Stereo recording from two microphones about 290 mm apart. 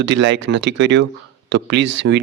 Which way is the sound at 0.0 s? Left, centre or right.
Right.